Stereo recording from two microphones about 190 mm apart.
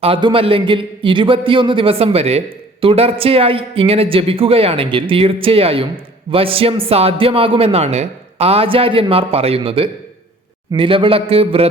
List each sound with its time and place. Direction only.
0.0 s a man's voice: 25° right (ahead or behind)